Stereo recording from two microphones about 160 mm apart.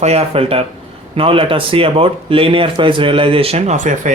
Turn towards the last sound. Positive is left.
turn(degrees=-50)  # may be behind; listen again after turning